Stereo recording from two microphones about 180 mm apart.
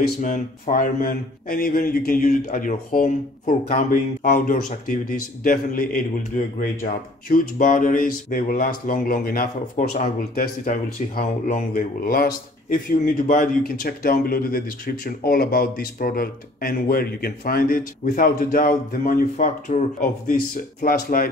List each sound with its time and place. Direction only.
0.2 s speech: 45° left (ahead or behind)